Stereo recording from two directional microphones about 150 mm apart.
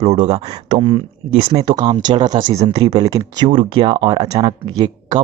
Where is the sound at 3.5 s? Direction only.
35° right (ahead or behind).